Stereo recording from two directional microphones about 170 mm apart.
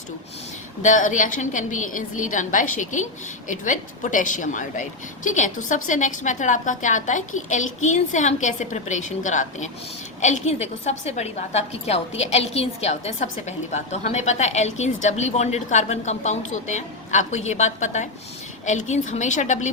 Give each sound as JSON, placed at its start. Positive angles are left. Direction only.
{"t": 0.8, "sound": "a woman's voice", "side_deg": 45}